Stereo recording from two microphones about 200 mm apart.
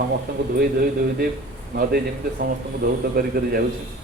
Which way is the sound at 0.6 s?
50° right (ahead or behind).